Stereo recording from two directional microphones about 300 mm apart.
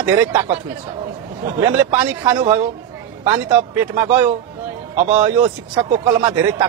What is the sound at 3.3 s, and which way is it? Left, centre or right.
Speech, centre.